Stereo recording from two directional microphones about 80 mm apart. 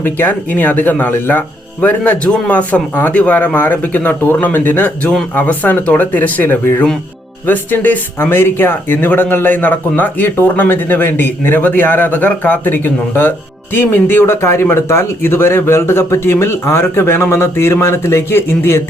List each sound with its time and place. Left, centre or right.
0.0 s speech: left